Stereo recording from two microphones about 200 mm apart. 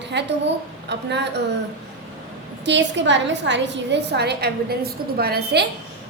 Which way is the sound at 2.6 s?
60° right (ahead or behind).